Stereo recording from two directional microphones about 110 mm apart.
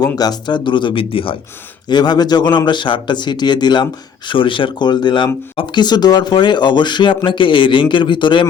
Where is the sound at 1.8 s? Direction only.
40° left (ahead or behind).